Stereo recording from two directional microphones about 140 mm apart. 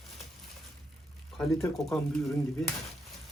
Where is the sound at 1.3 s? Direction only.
5° left (ahead or behind).